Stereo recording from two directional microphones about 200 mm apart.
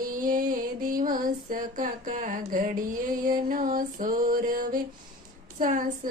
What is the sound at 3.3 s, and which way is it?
Music, 40° right (ahead or behind).